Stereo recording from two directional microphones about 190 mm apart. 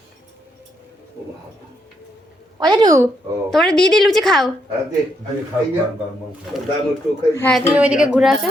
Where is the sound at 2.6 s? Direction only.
20° right (ahead or behind).